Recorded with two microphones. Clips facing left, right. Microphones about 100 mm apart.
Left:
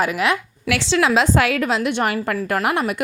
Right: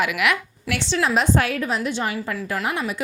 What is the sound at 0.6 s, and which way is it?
A woman's voice, 90° left.